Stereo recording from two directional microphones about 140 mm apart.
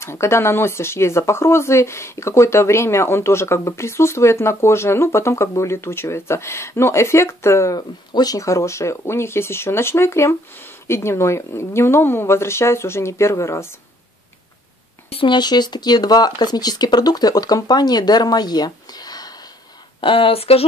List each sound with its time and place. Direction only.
0.0 s speech: 20° left (ahead or behind)
15.0 s speech: 40° left (ahead or behind)
20.0 s speech: 40° left (ahead or behind)